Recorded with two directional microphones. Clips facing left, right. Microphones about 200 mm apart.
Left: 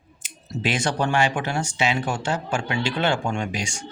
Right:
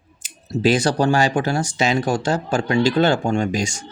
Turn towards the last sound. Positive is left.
turn(degrees=-40)  # may be behind; listen again after turning